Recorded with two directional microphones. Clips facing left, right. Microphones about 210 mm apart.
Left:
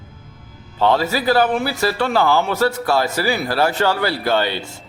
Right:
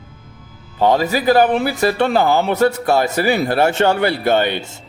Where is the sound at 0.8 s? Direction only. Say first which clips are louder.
Right 2 dB; 15° right (ahead or behind).